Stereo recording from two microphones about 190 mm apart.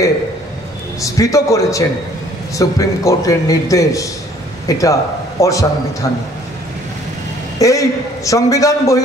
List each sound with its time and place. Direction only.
1.0 s a man's voice: 15° left (ahead or behind)
7.6 s a man's voice: 15° left (ahead or behind)